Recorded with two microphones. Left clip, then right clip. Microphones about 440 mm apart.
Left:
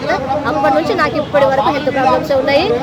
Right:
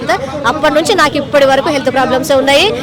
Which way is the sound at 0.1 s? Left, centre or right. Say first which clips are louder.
Right 3 dB; right.